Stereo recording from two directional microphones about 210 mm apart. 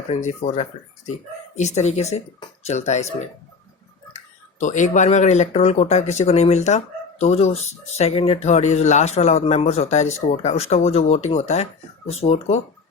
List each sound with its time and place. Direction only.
0.1 s speech: 35° left (ahead or behind)
4.6 s speech: 35° left (ahead or behind)